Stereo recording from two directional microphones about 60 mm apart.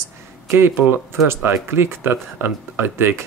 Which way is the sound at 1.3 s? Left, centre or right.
Right.